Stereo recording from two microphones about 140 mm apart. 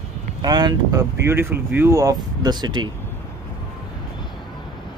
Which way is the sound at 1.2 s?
15° right (ahead or behind).